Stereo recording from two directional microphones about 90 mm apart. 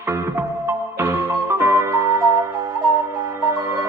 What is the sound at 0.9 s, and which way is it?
Music, 30° right (ahead or behind).